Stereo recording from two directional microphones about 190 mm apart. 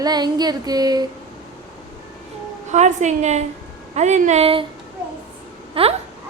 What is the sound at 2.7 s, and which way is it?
A woman's voice, 40° right (ahead or behind).